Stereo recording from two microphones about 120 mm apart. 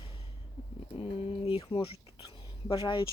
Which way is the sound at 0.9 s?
50° left (ahead or behind).